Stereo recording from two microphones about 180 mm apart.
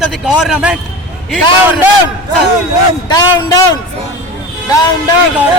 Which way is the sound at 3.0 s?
20° left (ahead or behind).